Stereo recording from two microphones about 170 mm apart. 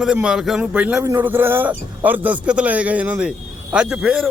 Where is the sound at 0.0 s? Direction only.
5° right (ahead or behind).